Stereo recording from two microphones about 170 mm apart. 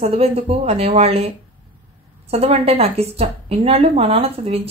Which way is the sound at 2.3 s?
35° right (ahead or behind).